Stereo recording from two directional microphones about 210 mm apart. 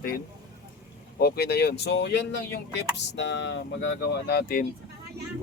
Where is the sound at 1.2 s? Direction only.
50° left (ahead or behind).